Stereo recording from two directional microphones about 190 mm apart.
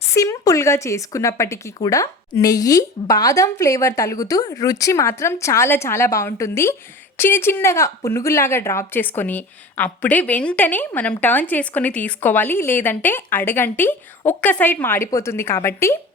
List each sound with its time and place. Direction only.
0.1 s a woman's voice: 15° left (ahead or behind)